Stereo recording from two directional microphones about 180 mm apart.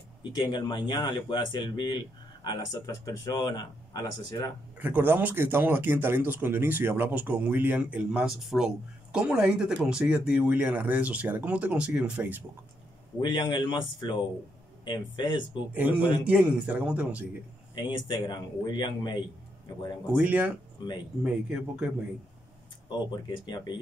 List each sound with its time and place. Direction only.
0.2 s speech: 25° left (ahead or behind)
4.7 s speech: 10° right (ahead or behind)
13.2 s speech: 25° left (ahead or behind)
15.7 s speech: 10° right (ahead or behind)
17.7 s speech: 25° left (ahead or behind)
20.2 s speech: 10° right (ahead or behind)
22.8 s speech: 25° left (ahead or behind)